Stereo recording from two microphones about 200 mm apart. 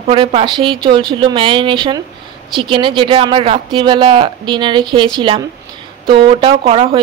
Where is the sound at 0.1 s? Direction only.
30° right (ahead or behind).